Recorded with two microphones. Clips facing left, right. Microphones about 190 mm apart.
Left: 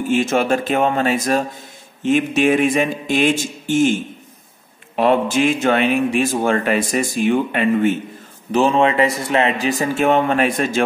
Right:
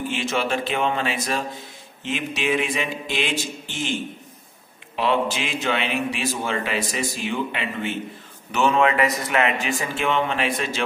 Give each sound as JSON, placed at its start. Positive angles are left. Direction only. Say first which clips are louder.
{"t": 0.1, "sound": "a man's voice", "louder": "left 10 dB", "side_deg": 45}
{"t": 8.5, "sound": "a man's voice", "louder": "left 4 dB", "side_deg": 35}